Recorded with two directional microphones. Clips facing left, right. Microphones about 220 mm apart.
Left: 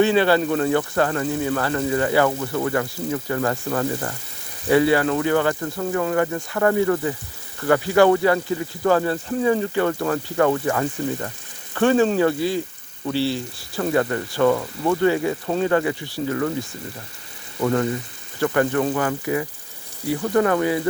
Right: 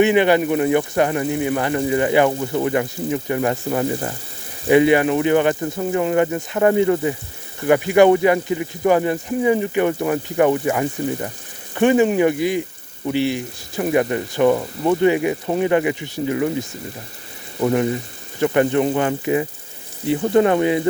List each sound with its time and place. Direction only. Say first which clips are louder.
0.0 s speech: right 2 dB; 15° right (ahead or behind)